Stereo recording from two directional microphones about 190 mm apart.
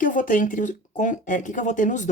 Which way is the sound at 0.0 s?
45° left (ahead or behind).